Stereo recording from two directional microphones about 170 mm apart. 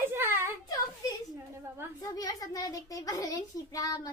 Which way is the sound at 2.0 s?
20° left (ahead or behind).